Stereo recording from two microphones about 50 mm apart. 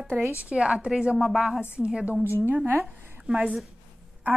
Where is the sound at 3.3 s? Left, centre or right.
Centre.